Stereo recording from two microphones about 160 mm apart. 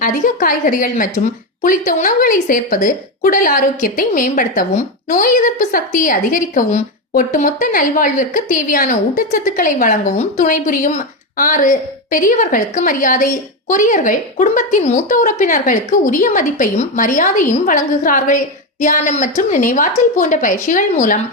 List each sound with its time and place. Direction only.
0.0 s a woman's voice: 55° left (ahead or behind)